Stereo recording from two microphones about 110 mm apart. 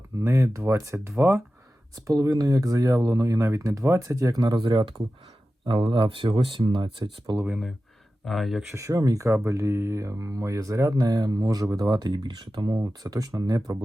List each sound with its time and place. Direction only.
0.2 s speech: 30° right (ahead or behind)
4.6 s speech: 45° right (ahead or behind)
7.0 s speech: 40° right (ahead or behind)
8.2 s speech: centre (ahead or behind)
8.7 s speech: 30° right (ahead or behind)